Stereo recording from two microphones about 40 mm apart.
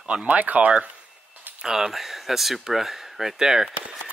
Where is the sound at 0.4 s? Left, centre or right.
Right.